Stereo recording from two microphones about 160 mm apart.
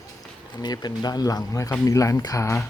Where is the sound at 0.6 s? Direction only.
25° left (ahead or behind).